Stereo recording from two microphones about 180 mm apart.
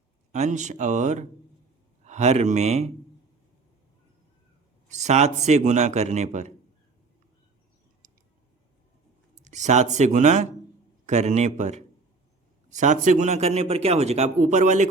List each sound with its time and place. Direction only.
0.3 s a man's voice: 40° right (ahead or behind)
4.9 s a man's voice: 40° right (ahead or behind)
9.3 s a man's voice: 40° right (ahead or behind)